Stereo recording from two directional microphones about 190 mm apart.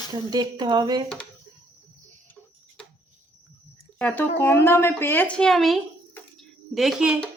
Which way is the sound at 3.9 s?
10° left (ahead or behind).